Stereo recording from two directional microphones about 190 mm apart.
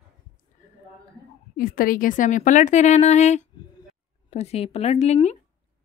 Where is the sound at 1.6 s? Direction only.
50° left (ahead or behind).